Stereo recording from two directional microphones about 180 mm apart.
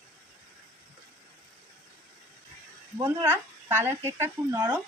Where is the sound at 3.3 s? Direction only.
10° right (ahead or behind).